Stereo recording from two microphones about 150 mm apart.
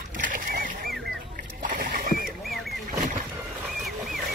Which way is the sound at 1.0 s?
70° right (ahead or behind).